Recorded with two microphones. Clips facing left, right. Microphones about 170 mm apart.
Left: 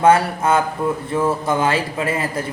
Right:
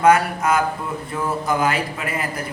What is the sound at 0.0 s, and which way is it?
A man's voice, 30° left (ahead or behind).